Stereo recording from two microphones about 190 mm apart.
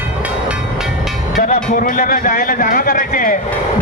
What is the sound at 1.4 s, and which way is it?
Speech, 50° left (ahead or behind).